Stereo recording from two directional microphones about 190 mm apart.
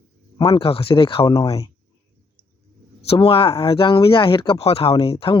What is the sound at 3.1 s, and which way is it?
Speech, 30° left (ahead or behind).